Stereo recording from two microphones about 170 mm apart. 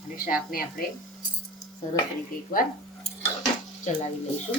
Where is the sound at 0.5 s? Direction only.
55° left (ahead or behind).